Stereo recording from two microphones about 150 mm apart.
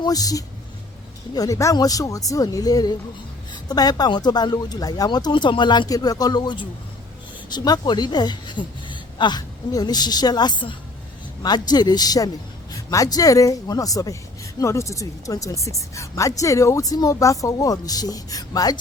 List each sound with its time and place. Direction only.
0.0 s a woman's voice: 25° left (ahead or behind)